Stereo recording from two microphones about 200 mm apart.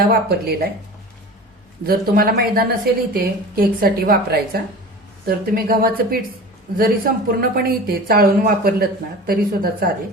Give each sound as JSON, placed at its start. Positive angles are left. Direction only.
{"t": 0.1, "sound": "speech", "side_deg": -50}
{"t": 1.9, "sound": "speech", "side_deg": -50}